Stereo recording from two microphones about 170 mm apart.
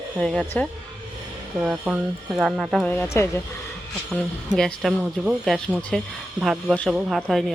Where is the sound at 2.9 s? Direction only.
15° left (ahead or behind).